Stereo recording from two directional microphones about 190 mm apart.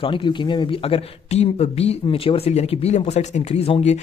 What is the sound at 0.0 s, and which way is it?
Speech, 25° left (ahead or behind).